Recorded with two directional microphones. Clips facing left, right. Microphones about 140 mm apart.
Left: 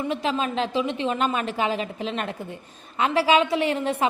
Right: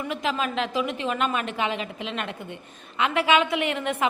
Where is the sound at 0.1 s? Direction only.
30° left (ahead or behind).